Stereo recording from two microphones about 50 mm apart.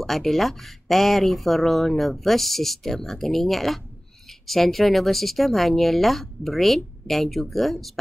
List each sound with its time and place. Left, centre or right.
0.0 s speech: centre